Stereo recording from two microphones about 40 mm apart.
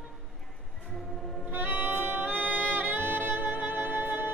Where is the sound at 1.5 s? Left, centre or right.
Right.